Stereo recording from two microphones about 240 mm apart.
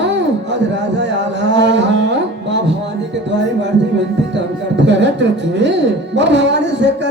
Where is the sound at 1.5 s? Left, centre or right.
Right.